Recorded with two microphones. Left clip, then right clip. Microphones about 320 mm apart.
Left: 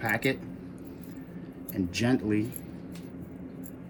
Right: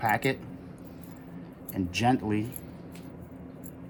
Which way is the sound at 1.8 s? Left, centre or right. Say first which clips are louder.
Right 3 dB; right.